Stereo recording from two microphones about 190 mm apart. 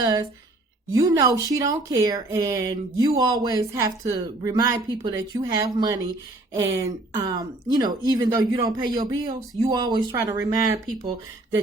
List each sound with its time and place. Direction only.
0.0 s a woman's voice: 20° right (ahead or behind)